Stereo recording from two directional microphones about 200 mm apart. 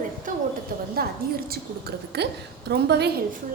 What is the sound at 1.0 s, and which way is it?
Speech, 50° right (ahead or behind).